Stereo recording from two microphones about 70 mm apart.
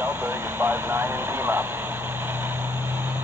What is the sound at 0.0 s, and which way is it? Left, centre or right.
Vehicle, right.